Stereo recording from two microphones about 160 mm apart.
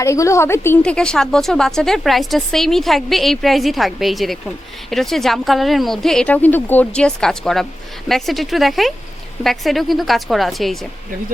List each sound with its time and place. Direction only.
0.0 s a woman's voice: 20° left (ahead or behind)
0.8 s speech: 5° left (ahead or behind)